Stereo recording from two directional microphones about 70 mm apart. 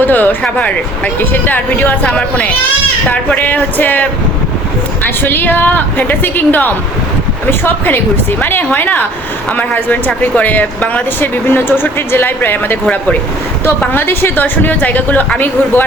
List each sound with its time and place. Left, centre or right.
0.0 s a sound: left
0.5 s speech: left
5.0 s speech: left